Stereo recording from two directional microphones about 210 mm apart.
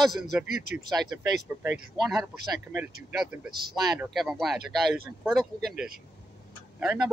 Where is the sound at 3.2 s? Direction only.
5° right (ahead or behind).